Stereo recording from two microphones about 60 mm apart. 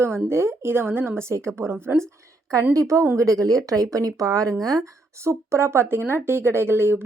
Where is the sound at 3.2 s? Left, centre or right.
Right.